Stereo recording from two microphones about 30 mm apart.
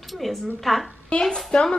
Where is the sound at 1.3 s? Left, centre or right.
Left.